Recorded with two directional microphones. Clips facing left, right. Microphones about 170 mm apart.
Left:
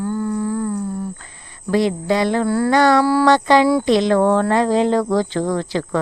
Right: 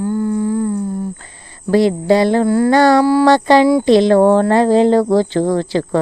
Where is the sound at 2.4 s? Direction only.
15° right (ahead or behind).